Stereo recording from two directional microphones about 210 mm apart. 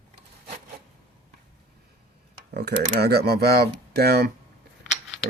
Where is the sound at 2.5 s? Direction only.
50° right (ahead or behind).